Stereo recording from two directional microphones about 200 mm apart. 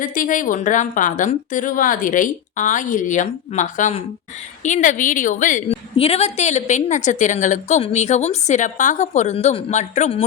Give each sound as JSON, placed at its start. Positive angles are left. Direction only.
{"t": 0.0, "sound": "a woman's voice", "side_deg": 40}